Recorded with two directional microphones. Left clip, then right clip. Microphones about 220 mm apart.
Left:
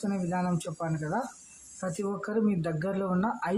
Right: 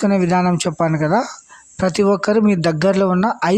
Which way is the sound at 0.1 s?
45° right (ahead or behind).